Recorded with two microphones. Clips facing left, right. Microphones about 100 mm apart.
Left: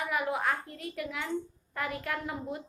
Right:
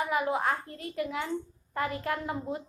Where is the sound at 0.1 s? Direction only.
25° right (ahead or behind).